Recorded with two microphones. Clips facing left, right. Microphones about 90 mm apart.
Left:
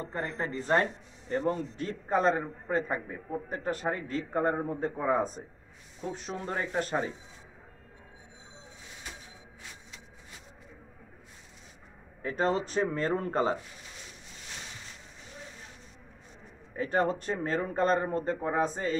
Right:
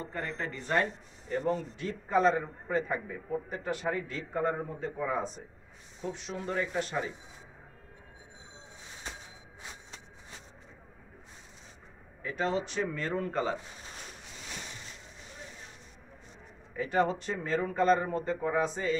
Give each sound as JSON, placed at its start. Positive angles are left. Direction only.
{"t": 0.0, "sound": "speech", "side_deg": 30}
{"t": 12.2, "sound": "speech", "side_deg": 40}
{"t": 16.7, "sound": "speech", "side_deg": 40}